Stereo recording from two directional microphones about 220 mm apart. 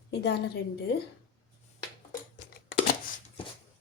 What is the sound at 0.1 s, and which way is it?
Speech, 50° left (ahead or behind).